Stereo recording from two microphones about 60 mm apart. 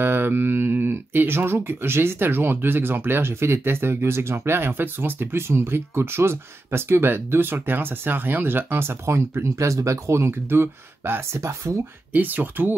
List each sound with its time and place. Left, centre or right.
0.0 s speech: right
10.5 s speech: right
12.1 s speech: right